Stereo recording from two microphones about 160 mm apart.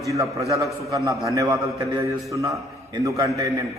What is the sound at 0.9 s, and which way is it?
A man's voice, 20° right (ahead or behind).